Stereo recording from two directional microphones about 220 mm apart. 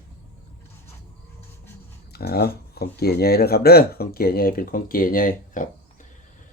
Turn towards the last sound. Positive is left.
turn(degrees=40)  # may be behind; listen again after turning